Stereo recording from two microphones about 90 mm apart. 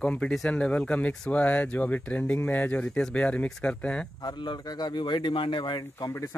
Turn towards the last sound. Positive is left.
turn(degrees=35)  # may be behind; listen again after turning